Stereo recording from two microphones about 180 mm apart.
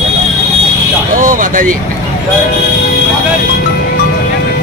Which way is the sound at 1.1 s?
45° right (ahead or behind).